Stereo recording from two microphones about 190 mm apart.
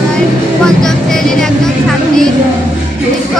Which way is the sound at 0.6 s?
5° left (ahead or behind).